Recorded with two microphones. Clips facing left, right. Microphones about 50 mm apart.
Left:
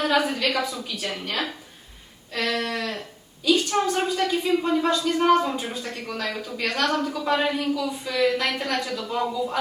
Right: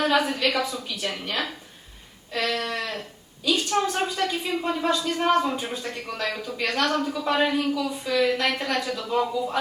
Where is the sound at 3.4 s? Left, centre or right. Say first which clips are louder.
Left 2 dB; centre.